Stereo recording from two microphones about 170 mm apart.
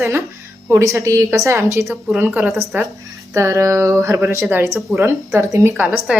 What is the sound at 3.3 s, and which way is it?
A woman's voice, 15° right (ahead or behind).